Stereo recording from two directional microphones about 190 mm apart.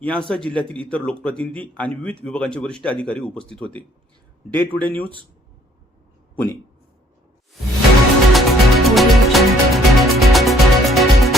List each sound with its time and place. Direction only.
0.0 s a man's voice: 5° left (ahead or behind)
6.3 s speech: 10° left (ahead or behind)
8.3 s music: centre (ahead or behind)